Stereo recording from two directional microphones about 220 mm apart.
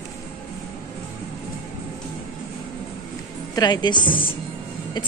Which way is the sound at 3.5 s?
20° left (ahead or behind).